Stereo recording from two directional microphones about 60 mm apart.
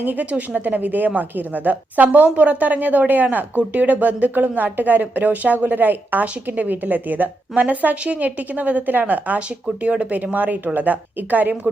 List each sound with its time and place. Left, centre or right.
0.0 s a woman's voice: right